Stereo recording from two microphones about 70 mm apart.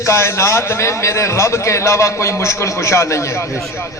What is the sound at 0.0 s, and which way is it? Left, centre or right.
A man's voice, left.